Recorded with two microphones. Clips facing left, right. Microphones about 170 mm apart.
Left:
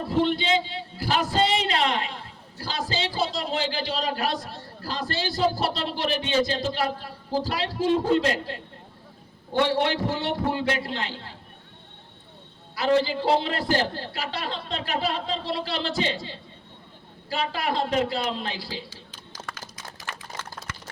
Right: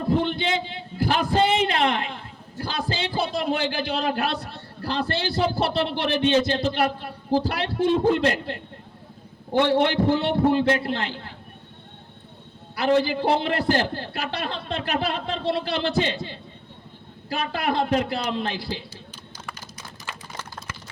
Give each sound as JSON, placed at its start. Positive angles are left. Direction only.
{"t": 0.3, "sound": "a man's voice", "side_deg": -55}
{"t": 12.7, "sound": "a man's voice", "side_deg": -55}